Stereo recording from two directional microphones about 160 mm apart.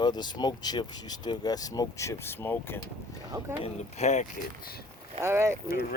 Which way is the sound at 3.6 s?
45° left (ahead or behind).